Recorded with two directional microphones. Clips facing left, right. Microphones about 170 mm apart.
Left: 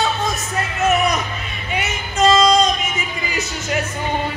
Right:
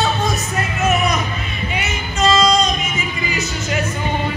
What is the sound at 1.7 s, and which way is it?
Music, 45° left (ahead or behind).